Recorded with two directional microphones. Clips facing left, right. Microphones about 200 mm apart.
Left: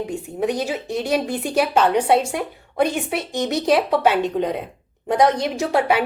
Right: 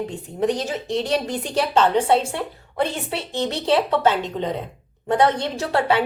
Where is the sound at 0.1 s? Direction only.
10° left (ahead or behind).